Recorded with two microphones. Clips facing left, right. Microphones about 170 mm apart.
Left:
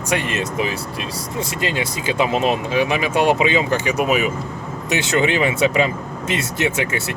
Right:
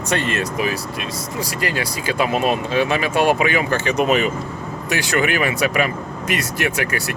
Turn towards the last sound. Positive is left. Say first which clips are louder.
# left 1 dB
turn(degrees=25)  # may be behind; listen again after turning